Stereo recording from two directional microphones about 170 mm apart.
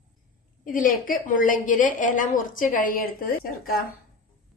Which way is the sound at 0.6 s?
50° left (ahead or behind).